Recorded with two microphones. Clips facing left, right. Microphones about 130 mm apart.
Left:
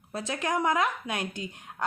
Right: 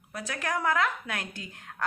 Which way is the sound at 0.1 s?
25° left (ahead or behind).